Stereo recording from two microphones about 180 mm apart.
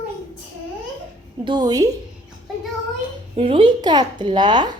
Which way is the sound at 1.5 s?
25° right (ahead or behind).